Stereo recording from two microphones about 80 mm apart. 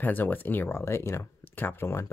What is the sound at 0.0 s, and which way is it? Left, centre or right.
Speech, left.